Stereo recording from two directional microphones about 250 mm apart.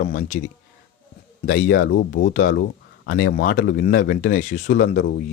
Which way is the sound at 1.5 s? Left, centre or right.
Left.